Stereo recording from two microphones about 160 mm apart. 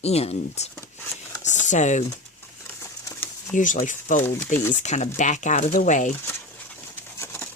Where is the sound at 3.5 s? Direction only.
50° left (ahead or behind).